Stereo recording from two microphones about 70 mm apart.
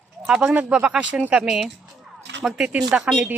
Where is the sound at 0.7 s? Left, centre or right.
Centre.